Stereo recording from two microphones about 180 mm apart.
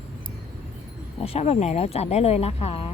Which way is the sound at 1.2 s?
35° left (ahead or behind).